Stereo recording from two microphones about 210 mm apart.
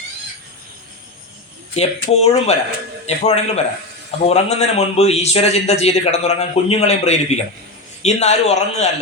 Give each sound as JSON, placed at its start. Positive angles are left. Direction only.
{"t": 1.7, "sound": "a man's voice", "side_deg": 30}